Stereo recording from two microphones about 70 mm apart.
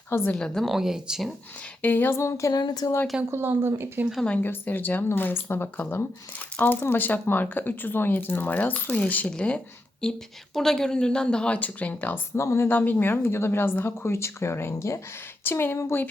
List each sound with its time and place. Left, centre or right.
0.1 s speech: left
0.3 s speech: centre
1.8 s speech: left
2.1 s a sound: left
2.5 s speech: left
3.2 s speech: right
4.3 s speech: left
10.0 s speech: centre; by 12.2 s left
12.4 s speech: left
12.6 s speech: left